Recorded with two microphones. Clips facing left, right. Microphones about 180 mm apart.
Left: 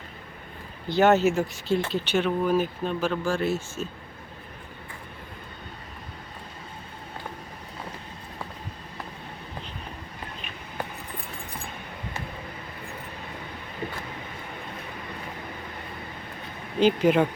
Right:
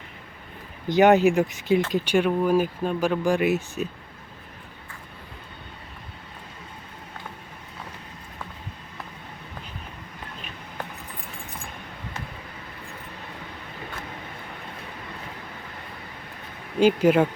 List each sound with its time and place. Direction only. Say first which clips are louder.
0.9 s speech: right 3 dB; 15° right (ahead or behind)
16.8 s speech: right 2 dB; 5° right (ahead or behind)